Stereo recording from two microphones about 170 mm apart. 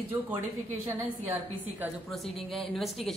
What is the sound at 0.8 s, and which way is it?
A woman's voice, 10° right (ahead or behind).